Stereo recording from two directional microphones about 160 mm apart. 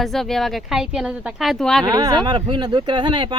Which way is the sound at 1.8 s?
25° right (ahead or behind).